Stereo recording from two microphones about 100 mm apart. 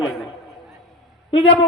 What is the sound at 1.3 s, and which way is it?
Speech, 65° left (ahead or behind).